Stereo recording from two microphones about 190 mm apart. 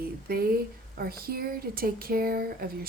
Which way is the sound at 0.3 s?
55° right (ahead or behind).